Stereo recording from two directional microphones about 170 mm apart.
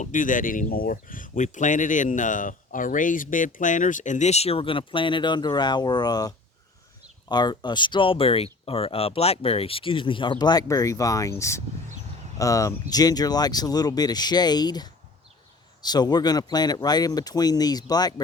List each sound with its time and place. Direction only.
0.0 s speech: 50° left (ahead or behind); by 18.1 s 25° left (ahead or behind)